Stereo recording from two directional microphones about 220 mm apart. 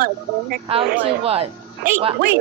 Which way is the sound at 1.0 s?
25° right (ahead or behind).